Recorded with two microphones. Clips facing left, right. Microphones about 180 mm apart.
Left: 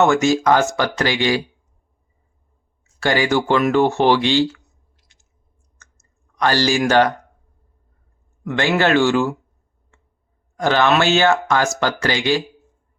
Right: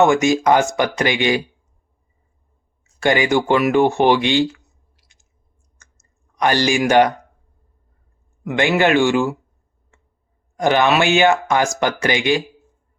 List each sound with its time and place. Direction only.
0.0 s speech: 15° right (ahead or behind)
3.0 s speech: 20° right (ahead or behind)
4.9 s a sound: 15° right (ahead or behind)
5.7 s clicking: 15° right (ahead or behind)
8.4 s speech: 15° right (ahead or behind)
10.6 s speech: 15° right (ahead or behind)